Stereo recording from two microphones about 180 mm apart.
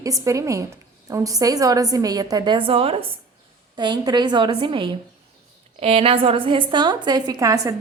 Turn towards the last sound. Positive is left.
turn(degrees=-20)  # may be behind; listen again after turning